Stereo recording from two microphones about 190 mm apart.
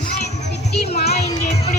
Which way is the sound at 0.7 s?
55° left (ahead or behind).